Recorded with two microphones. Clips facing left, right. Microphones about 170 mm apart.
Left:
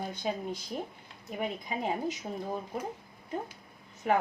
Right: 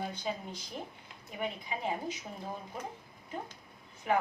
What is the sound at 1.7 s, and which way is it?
Speech, 45° left (ahead or behind).